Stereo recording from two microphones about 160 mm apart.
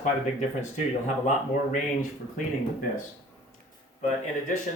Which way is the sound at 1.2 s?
50° left (ahead or behind).